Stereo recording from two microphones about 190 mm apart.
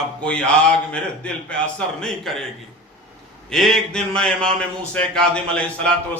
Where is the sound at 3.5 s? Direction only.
Centre (ahead or behind).